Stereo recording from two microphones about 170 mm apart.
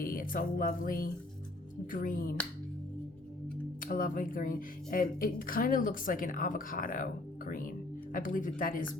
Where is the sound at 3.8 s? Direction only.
55° left (ahead or behind).